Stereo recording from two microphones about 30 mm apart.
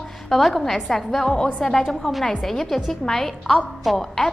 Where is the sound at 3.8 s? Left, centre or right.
Centre.